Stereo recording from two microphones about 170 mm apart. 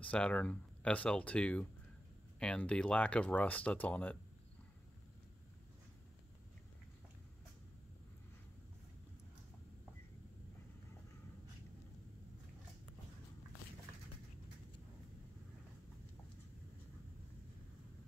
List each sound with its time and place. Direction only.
0.0 s speech: 5° left (ahead or behind)